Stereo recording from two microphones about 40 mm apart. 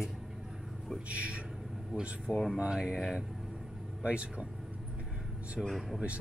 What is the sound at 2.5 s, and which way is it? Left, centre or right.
Speech, right.